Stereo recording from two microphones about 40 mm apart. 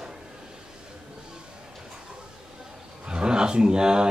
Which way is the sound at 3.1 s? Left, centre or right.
Right.